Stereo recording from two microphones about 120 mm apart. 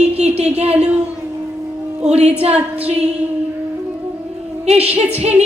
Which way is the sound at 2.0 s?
65° right (ahead or behind).